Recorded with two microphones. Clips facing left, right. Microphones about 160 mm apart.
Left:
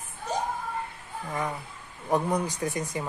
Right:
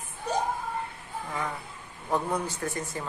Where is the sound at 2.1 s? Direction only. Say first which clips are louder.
Left 3 dB; 15° left (ahead or behind).